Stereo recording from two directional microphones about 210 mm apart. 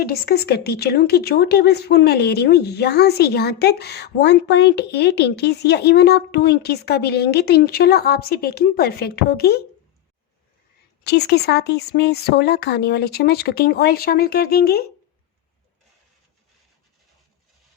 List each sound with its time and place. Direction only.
0.0 s a woman's voice: 50° left (ahead or behind)
11.0 s a woman's voice: 50° left (ahead or behind)